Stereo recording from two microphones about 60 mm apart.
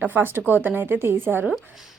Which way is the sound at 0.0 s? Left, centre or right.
Right.